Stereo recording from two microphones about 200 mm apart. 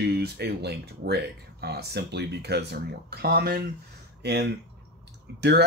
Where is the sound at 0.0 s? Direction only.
55° right (ahead or behind).